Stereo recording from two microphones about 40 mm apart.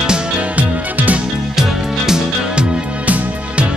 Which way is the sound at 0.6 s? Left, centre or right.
Right.